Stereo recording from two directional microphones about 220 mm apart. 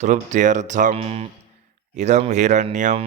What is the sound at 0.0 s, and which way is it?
Mantra, 30° right (ahead or behind).